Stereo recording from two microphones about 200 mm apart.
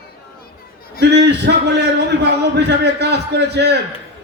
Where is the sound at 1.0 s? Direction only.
60° right (ahead or behind).